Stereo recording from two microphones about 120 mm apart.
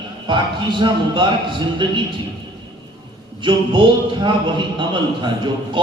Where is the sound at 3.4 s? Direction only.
40° right (ahead or behind).